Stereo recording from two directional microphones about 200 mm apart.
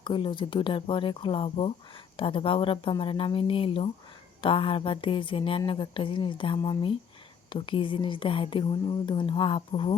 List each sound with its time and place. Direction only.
0.0 s speech: 25° left (ahead or behind)